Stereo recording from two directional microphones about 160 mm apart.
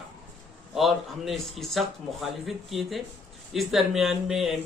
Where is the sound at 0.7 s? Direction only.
Centre (ahead or behind).